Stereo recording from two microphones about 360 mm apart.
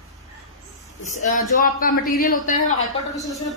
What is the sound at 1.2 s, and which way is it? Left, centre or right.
Speech, left.